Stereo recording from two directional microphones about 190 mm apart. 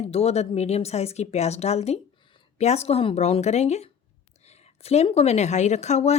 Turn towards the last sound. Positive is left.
turn(degrees=35)  # may be behind; listen again after turning